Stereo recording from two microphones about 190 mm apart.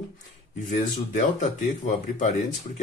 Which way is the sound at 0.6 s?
40° left (ahead or behind).